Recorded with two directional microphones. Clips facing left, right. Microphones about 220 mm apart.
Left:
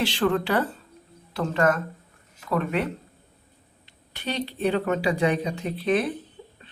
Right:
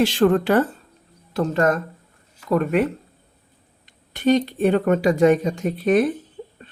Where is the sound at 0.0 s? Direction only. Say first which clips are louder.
Right 6 dB; 45° right (ahead or behind).